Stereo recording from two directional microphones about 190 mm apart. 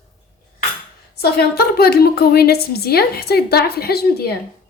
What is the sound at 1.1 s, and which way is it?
A woman's voice, 55° left (ahead or behind).